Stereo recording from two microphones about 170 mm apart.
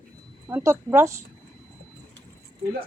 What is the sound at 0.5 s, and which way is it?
Speech, 15° right (ahead or behind).